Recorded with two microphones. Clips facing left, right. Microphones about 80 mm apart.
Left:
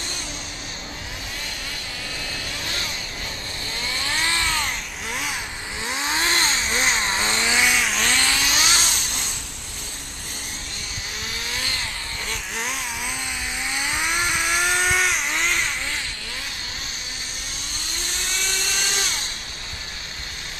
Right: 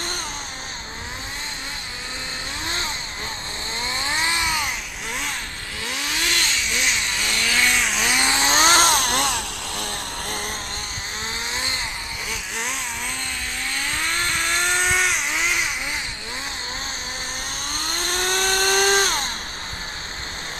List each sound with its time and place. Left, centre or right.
2.6 s vehicle: right; by 4.7 s centre
5.1 s vehicle: centre
5.8 s vehicle: left
7.7 s chainsaw: centre
8.1 s vehicle: right
11.5 s vehicle: right
12.3 s vehicle: centre
13.7 s vehicle: centre
17.7 s chainsaw: right